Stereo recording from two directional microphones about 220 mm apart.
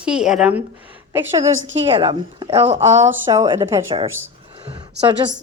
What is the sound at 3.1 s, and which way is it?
Speech, 15° right (ahead or behind).